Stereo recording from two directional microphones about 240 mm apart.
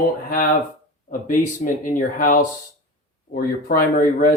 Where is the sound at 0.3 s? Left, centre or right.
Left.